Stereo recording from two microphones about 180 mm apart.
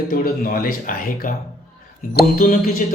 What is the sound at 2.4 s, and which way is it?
Speech, 50° left (ahead or behind).